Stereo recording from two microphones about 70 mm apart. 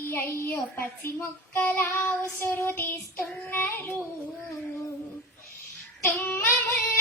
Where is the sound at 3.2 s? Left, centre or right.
Centre.